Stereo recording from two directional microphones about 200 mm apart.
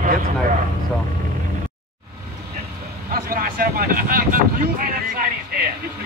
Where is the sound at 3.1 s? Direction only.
45° right (ahead or behind).